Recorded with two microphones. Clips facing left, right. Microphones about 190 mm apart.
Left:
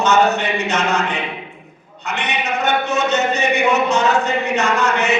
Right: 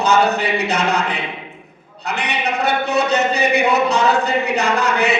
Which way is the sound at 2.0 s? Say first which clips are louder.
Right 1 dB; 35° right (ahead or behind).